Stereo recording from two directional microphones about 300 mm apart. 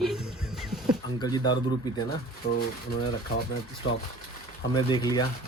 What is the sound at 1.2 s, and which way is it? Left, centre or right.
Speech, centre.